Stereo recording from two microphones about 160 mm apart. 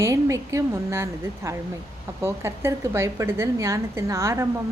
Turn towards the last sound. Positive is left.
turn(degrees=-15)  # may be behind; listen again after turning